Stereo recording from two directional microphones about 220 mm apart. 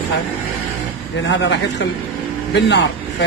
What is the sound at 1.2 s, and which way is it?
A man's voice, 55° left (ahead or behind).